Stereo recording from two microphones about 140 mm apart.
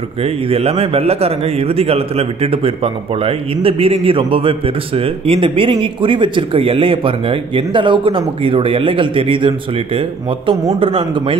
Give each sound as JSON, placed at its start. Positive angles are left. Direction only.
{"t": 0.2, "sound": "speech", "side_deg": -45}